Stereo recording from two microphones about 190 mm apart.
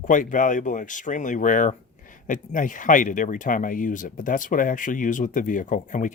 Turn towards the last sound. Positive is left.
turn(degrees=45)  # may be behind; listen again after turning